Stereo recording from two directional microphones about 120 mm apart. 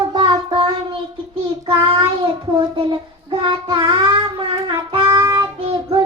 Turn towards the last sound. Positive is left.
turn(degrees=-45)  # may be behind; listen again after turning